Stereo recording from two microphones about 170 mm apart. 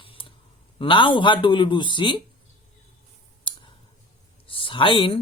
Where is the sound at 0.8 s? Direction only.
30° left (ahead or behind).